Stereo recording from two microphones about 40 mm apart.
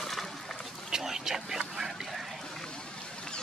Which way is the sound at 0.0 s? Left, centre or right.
Centre.